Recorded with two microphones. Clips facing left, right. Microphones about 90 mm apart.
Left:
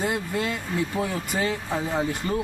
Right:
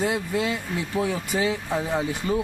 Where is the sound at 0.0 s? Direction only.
Centre (ahead or behind).